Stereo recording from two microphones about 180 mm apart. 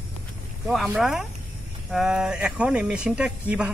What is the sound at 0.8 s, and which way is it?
Speech, centre (ahead or behind).